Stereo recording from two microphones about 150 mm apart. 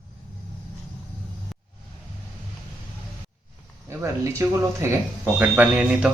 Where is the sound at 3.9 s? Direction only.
15° right (ahead or behind).